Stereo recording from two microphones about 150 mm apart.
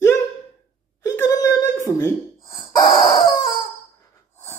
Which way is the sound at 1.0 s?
20° left (ahead or behind).